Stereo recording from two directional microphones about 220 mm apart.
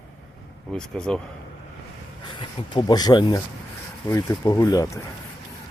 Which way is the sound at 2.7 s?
20° left (ahead or behind).